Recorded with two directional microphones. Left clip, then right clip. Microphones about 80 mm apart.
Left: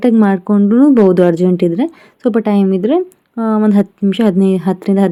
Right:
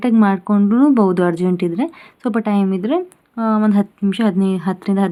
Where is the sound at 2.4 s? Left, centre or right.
Left.